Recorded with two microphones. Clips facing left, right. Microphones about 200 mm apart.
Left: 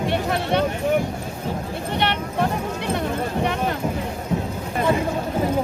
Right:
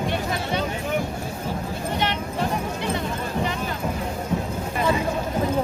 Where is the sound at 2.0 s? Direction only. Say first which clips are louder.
Left 5 dB; 65° left (ahead or behind).